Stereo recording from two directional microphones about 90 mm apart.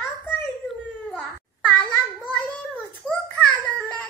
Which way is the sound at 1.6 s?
15° left (ahead or behind).